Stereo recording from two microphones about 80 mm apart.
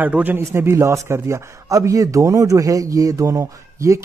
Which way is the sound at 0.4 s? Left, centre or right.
Right.